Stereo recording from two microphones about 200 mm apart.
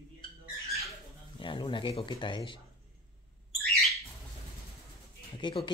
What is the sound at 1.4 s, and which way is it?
Speech, 25° left (ahead or behind).